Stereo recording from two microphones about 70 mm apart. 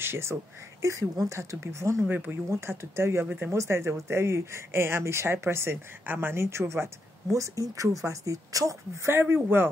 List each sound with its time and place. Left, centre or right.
0.0 s speech: right
0.8 s speech: right
2.0 s speech: right
2.5 s speech: right
3.5 s speech: right
9.1 s speech: right